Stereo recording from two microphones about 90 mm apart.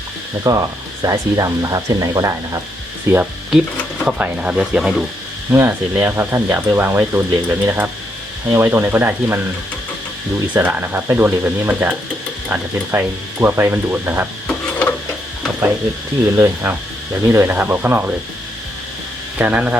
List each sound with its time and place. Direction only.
0.4 s speech: 40° right (ahead or behind)
4.0 s speech: 15° right (ahead or behind)
5.5 s speech: 25° right (ahead or behind)
10.5 s speech: 20° right (ahead or behind)
14.4 s a sound: 15° left (ahead or behind)
16.3 s speech: 30° right (ahead or behind)
19.4 s speech: 15° right (ahead or behind)